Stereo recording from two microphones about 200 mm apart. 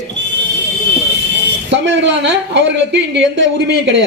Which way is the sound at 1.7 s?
60° right (ahead or behind).